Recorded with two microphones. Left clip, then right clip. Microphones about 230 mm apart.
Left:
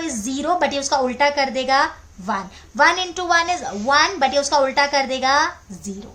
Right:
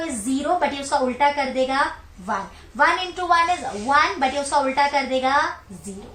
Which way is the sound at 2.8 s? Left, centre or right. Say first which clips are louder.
Left 3 dB; left.